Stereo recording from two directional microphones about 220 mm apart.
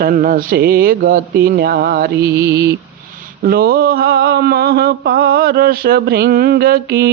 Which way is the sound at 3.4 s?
45° right (ahead or behind).